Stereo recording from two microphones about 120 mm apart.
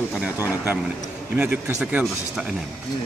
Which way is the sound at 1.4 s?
15° right (ahead or behind).